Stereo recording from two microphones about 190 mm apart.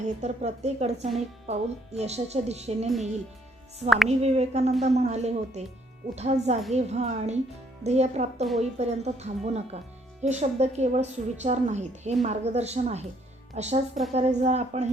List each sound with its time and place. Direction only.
0.0 s a woman's voice: 35° right (ahead or behind)
3.8 s speech: centre (ahead or behind)
4.2 s a woman's voice: 35° right (ahead or behind)